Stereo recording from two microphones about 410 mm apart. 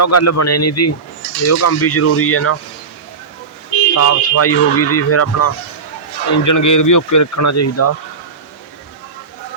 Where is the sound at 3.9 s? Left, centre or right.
Left.